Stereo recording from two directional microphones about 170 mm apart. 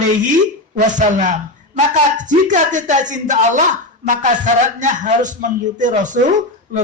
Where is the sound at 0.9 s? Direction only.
50° right (ahead or behind).